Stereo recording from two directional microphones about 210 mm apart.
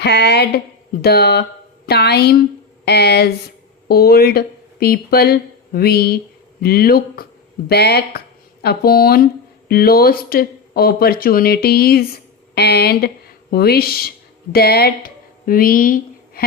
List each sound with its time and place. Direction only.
0.0 s speech: 50° left (ahead or behind)